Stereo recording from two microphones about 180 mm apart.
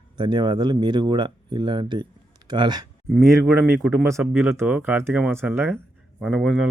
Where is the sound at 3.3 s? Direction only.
10° right (ahead or behind).